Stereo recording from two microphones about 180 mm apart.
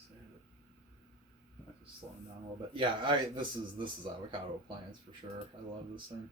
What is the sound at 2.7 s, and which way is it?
Speech, 30° right (ahead or behind).